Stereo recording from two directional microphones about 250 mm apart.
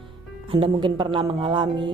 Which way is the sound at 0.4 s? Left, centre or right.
Right.